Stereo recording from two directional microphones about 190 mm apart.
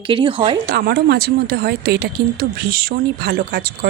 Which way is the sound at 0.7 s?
55° right (ahead or behind).